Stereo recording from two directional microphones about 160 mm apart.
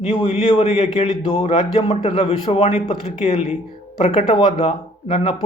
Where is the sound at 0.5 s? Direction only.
35° left (ahead or behind).